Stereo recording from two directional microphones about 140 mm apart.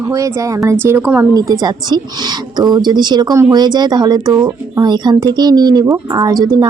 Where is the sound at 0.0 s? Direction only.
25° right (ahead or behind).